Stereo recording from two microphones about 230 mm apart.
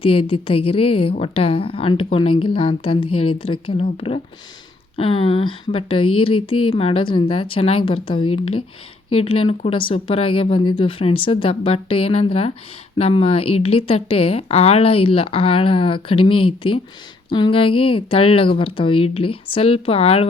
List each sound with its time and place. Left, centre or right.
0.0 s speech: left
4.9 s speech: left